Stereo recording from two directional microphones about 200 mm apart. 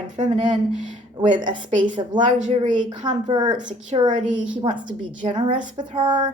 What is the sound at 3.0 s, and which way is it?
Speech, 20° right (ahead or behind).